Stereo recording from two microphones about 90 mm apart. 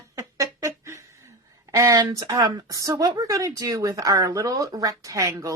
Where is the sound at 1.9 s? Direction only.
45° right (ahead or behind).